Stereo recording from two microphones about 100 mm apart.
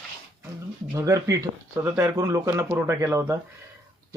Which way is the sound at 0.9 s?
35° right (ahead or behind).